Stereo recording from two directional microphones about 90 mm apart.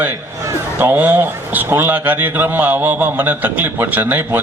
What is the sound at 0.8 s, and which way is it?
A man's voice, 20° right (ahead or behind).